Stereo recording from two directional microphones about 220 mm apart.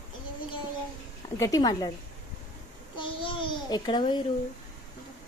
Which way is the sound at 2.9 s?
25° left (ahead or behind).